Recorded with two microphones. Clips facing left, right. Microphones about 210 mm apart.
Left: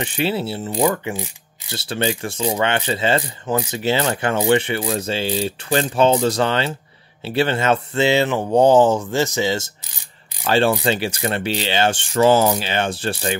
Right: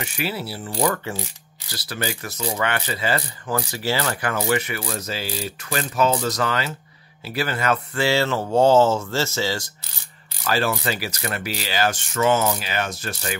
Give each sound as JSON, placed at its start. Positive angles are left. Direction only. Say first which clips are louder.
{"t": 0.0, "sound": "mechanisms", "louder": "left 6 dB", "side_deg": 30}
{"t": 7.2, "sound": "speech", "louder": "left 5 dB", "side_deg": 25}
{"t": 10.8, "sound": "mechanisms", "louder": "left 6 dB", "side_deg": 25}